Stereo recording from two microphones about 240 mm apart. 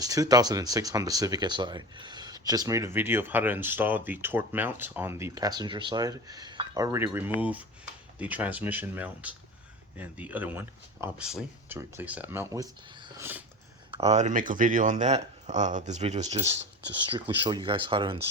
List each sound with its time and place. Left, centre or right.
0.0 s speech: centre
14.0 s speech: right